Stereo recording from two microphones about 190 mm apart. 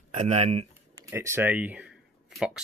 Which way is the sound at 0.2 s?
35° right (ahead or behind).